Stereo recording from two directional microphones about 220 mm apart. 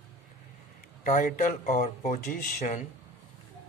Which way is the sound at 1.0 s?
35° left (ahead or behind).